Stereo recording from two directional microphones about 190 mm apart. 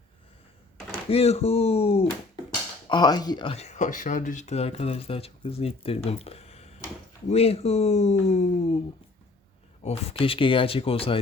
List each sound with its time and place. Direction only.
1.1 s speech: 30° left (ahead or behind)
9.8 s speech: 35° left (ahead or behind)